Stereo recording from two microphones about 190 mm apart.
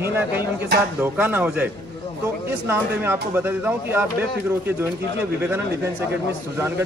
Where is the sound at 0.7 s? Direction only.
60° right (ahead or behind).